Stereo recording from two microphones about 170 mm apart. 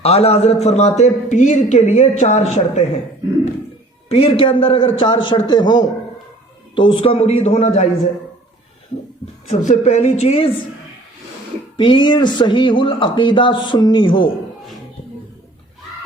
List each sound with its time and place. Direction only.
0.0 s a man's voice: 35° left (ahead or behind)
4.1 s a man's voice: 35° left (ahead or behind)
9.5 s a man's voice: 45° left (ahead or behind)
11.8 s speech: 25° left (ahead or behind)